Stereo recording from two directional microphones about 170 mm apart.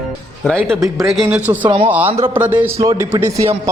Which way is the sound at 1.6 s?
30° right (ahead or behind).